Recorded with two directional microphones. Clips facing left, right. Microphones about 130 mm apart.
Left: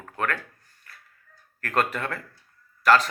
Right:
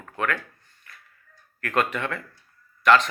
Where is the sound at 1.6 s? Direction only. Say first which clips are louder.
Right 1 dB; 35° left (ahead or behind).